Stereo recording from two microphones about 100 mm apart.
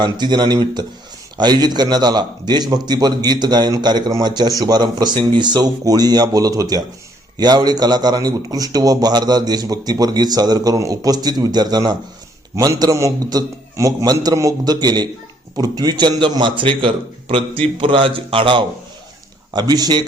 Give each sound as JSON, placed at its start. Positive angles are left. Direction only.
{"t": 0.0, "sound": "a man's voice", "side_deg": -50}
{"t": 19.5, "sound": "a man's voice", "side_deg": -40}